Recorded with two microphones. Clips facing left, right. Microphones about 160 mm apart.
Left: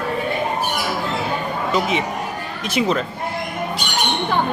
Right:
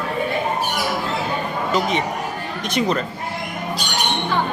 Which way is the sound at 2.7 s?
5° left (ahead or behind).